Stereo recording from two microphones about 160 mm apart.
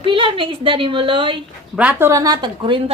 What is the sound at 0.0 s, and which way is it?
A woman's voice, 30° right (ahead or behind).